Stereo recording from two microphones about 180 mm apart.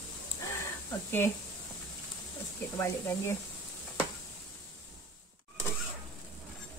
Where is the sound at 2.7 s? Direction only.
15° left (ahead or behind).